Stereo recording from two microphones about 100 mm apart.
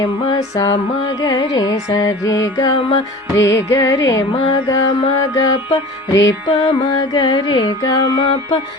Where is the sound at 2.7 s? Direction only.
55° left (ahead or behind).